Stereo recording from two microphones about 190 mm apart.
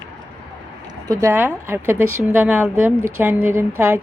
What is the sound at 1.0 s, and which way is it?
Speech, 15° right (ahead or behind).